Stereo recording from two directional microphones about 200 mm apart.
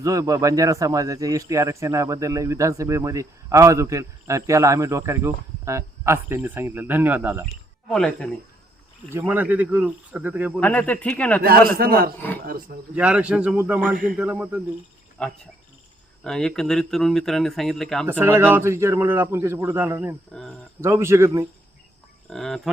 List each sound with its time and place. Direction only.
0.0 s a man's voice: 15° right (ahead or behind)
7.9 s speech: 5° left (ahead or behind)
9.0 s a man's voice: 10° right (ahead or behind)
10.6 s speech: 10° left (ahead or behind)
11.4 s a man's voice: 50° right (ahead or behind)
12.9 s a man's voice: 5° right (ahead or behind)
15.2 s speech: 5° left (ahead or behind)
18.2 s a man's voice: 10° right (ahead or behind)
22.3 s speech: centre (ahead or behind)